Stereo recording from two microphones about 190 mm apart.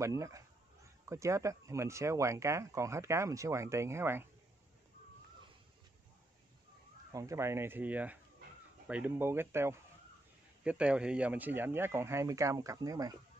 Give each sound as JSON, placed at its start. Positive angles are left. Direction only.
{"t": 0.0, "sound": "speech", "side_deg": -15}
{"t": 7.1, "sound": "speech", "side_deg": -15}